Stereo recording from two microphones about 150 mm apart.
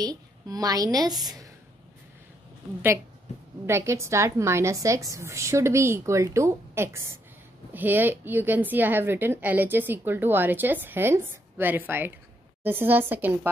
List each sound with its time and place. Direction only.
0.0 s a woman's voice: 25° right (ahead or behind)
3.3 s a sound: 45° left (ahead or behind)
3.6 s a woman's voice: 20° right (ahead or behind)